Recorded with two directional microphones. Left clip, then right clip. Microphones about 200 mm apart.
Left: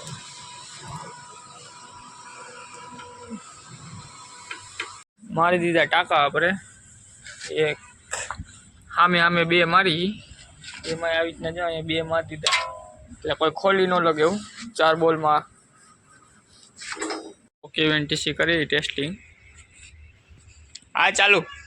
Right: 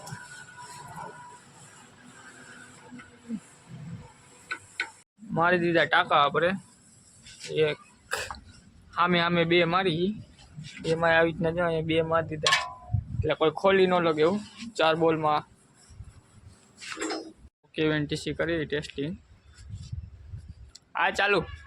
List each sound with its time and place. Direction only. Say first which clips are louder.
5.3 s a man's voice: left 3 dB; centre (ahead or behind)
9.0 s a man's voice: left 6 dB; centre (ahead or behind)
10.9 s speech: right 2 dB; 35° right (ahead or behind); by 12.4 s 15° right (ahead or behind)
13.2 s a man's voice: left 2 dB; 5° right (ahead or behind)
17.6 s a man's voice: left 5 dB; centre (ahead or behind)
20.9 s a man's voice: left 7 dB; 5° left (ahead or behind)